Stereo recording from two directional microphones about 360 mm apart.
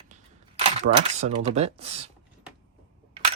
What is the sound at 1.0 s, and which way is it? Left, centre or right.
Speech, centre.